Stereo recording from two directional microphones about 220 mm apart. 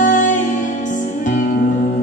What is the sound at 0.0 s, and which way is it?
Music, 35° left (ahead or behind).